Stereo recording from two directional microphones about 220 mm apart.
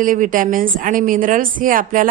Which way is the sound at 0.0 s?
35° right (ahead or behind).